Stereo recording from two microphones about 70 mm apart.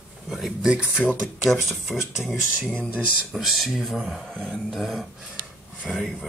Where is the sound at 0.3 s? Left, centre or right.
Centre.